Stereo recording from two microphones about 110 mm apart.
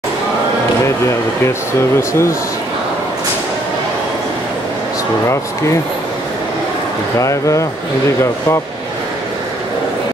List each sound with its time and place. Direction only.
2.0 s speech: 25° left (ahead or behind)
7.2 s speech: 30° left (ahead or behind)